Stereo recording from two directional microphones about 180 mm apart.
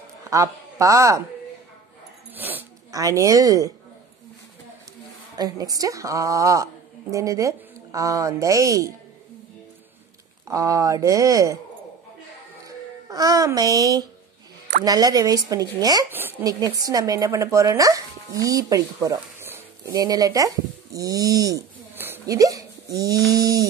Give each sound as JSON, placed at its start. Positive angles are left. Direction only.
{"t": 0.2, "sound": "a woman's voice", "side_deg": -20}
{"t": 2.3, "sound": "speech", "side_deg": -10}
{"t": 5.3, "sound": "a woman's voice", "side_deg": -20}
{"t": 10.5, "sound": "a woman's voice", "side_deg": -20}
{"t": 12.6, "sound": "a woman's voice", "side_deg": -20}